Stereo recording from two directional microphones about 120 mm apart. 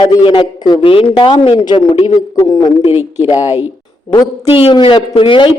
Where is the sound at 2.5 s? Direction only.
35° left (ahead or behind).